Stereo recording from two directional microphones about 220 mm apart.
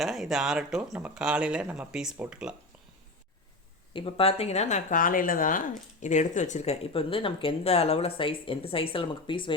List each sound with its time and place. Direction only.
0.0 s speech: centre (ahead or behind)
3.9 s speech: 25° left (ahead or behind)